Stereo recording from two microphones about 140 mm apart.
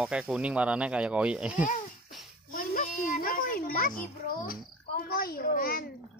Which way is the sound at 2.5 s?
75° left (ahead or behind).